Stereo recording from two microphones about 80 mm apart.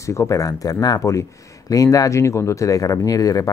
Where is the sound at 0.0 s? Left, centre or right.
Left.